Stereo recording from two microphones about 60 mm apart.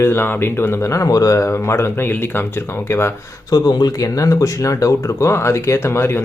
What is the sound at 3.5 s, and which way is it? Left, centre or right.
Speech, left.